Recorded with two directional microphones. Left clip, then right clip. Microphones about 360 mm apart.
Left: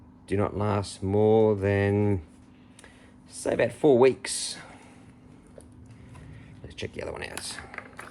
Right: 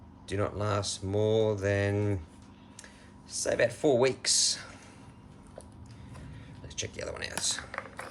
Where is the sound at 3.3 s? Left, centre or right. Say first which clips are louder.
Left 2 dB; centre.